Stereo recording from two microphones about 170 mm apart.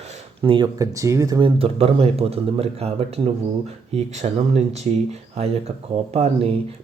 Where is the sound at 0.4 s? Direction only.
30° right (ahead or behind).